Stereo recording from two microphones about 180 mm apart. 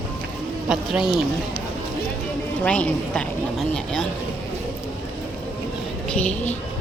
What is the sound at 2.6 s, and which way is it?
A woman's voice, 5° left (ahead or behind).